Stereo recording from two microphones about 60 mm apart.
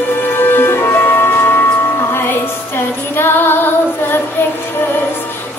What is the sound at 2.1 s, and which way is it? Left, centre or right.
Female singing, left.